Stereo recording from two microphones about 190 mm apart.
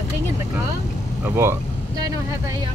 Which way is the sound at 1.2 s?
15° right (ahead or behind).